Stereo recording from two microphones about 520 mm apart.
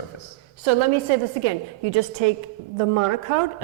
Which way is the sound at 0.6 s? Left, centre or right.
Right.